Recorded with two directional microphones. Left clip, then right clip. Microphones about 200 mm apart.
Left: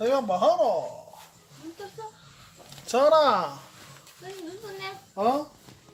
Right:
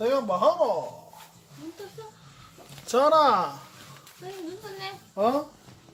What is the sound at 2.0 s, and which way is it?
Speech, 30° right (ahead or behind).